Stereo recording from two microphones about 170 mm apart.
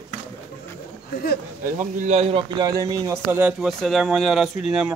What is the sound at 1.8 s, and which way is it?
Speech, 45° right (ahead or behind).